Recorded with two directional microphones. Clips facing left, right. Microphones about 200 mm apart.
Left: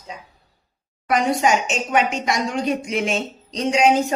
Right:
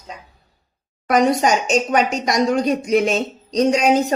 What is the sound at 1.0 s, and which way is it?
A woman's voice, 40° right (ahead or behind).